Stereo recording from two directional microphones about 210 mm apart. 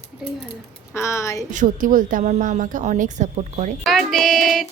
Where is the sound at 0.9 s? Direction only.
15° left (ahead or behind).